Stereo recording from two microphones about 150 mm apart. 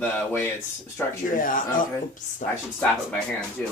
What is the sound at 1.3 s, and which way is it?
Speech, 65° left (ahead or behind).